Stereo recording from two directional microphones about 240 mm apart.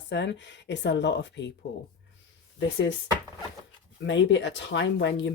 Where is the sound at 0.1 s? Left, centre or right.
Left.